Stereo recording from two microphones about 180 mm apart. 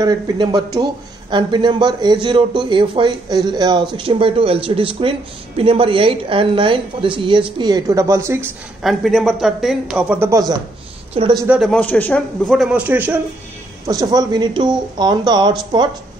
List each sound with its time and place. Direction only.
0.0 s speech: 20° right (ahead or behind)
8.8 s speech: centre (ahead or behind); by 11.4 s 25° right (ahead or behind)
11.4 s speech: 5° right (ahead or behind)
11.7 s speech: 10° left (ahead or behind); by 13.2 s 10° right (ahead or behind)
13.8 s speech: 20° right (ahead or behind)